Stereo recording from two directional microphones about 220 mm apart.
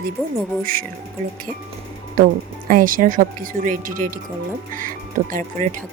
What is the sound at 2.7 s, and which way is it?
Speech, 40° right (ahead or behind).